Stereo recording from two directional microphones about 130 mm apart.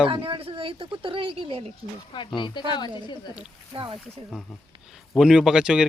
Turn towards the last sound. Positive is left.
turn(degrees=-5)  # may be behind; listen again after turning